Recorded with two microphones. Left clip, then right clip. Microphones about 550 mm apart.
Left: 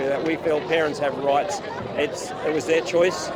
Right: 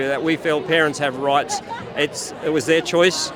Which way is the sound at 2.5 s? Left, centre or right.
Right.